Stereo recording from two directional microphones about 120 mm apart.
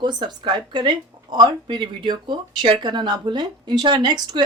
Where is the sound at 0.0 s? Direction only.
40° right (ahead or behind).